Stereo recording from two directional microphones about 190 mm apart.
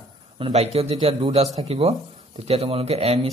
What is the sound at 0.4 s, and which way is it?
Speech, 35° right (ahead or behind).